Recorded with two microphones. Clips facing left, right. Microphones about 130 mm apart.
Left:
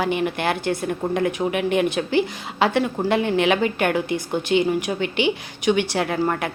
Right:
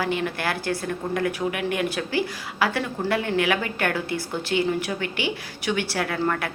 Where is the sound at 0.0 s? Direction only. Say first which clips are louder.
Left 4 dB; 20° left (ahead or behind).